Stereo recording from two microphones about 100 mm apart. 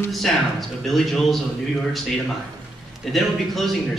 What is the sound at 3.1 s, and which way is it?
Speech, centre (ahead or behind).